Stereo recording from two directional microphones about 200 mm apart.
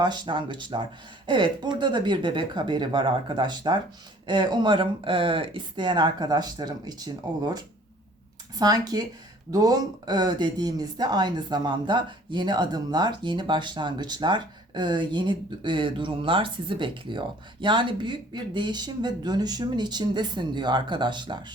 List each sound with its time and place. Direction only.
0.0 s speech: 20° right (ahead or behind)